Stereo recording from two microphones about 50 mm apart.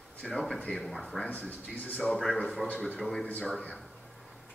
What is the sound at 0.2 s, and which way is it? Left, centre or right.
Speech, centre.